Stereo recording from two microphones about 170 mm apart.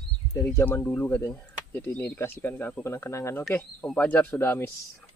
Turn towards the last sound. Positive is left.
turn(degrees=15)  # may be behind; listen again after turning